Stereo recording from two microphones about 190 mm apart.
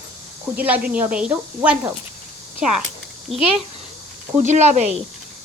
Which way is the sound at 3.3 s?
Centre (ahead or behind).